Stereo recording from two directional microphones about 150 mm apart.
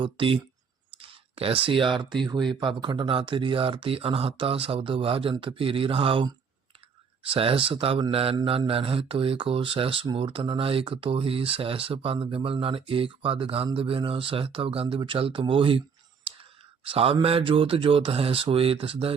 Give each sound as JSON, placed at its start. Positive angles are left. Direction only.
{"t": 0.0, "sound": "a man's voice", "side_deg": -35}
{"t": 16.9, "sound": "a man's voice", "side_deg": -40}